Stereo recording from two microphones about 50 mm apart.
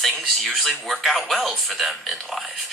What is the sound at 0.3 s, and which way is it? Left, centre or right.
Speech, centre.